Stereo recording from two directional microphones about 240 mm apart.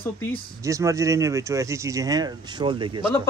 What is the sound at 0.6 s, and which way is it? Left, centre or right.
Speech, centre.